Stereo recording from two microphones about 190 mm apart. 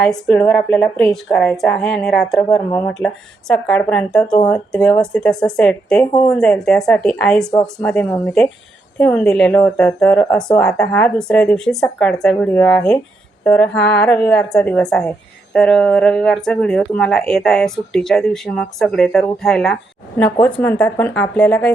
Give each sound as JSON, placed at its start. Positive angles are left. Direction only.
{"t": 0.0, "sound": "a woman's voice", "side_deg": 5}